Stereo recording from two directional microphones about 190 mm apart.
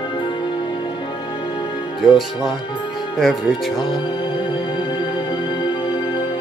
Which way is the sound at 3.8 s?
25° left (ahead or behind).